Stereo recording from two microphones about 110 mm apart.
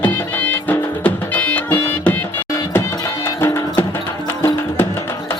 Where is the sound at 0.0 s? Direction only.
15° left (ahead or behind).